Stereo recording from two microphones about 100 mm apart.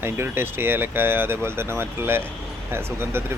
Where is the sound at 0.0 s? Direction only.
25° right (ahead or behind).